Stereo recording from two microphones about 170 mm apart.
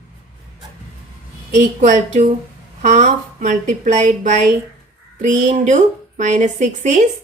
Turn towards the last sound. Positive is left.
turn(degrees=-45)  # may be behind; listen again after turning